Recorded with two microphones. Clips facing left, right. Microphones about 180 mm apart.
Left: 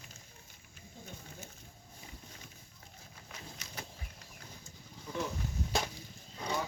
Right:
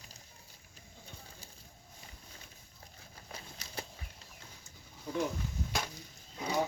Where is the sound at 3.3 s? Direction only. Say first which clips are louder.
Right 2 dB; 35° right (ahead or behind).